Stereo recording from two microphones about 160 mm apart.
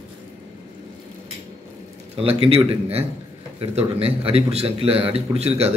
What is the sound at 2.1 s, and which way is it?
A man's voice, 40° right (ahead or behind).